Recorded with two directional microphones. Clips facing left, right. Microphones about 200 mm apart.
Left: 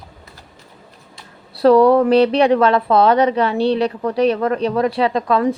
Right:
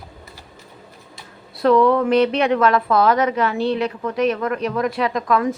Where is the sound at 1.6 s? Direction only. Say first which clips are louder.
Left 4 dB; 40° left (ahead or behind).